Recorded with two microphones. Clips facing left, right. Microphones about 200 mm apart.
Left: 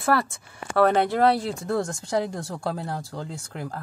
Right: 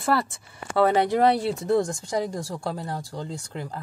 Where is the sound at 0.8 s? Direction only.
15° right (ahead or behind).